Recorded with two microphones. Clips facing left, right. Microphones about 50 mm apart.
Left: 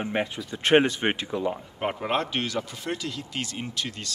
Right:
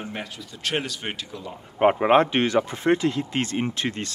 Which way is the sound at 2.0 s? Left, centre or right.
Right.